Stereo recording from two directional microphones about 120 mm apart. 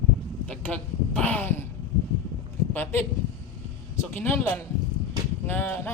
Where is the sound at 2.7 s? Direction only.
15° left (ahead or behind).